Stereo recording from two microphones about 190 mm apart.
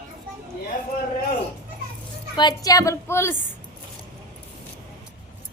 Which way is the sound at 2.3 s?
25° left (ahead or behind).